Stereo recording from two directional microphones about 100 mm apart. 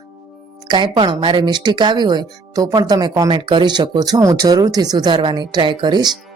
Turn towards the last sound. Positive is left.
turn(degrees=-45)  # may be behind; listen again after turning